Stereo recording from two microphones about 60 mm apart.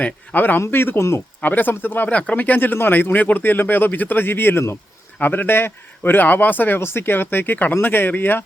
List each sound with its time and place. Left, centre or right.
0.0 s speech: left
1.4 s speech: left
2.0 s speech: left